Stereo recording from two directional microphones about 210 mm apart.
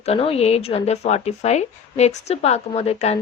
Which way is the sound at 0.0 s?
30° left (ahead or behind).